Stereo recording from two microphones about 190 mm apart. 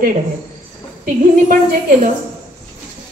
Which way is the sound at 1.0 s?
45° right (ahead or behind).